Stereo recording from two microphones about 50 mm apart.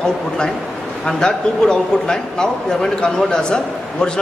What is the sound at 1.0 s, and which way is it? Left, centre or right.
A man's voice, centre.